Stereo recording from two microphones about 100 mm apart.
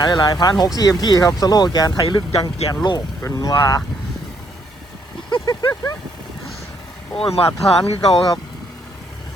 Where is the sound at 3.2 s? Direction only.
40° left (ahead or behind).